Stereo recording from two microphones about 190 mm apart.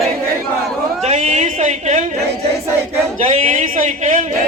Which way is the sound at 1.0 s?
35° right (ahead or behind).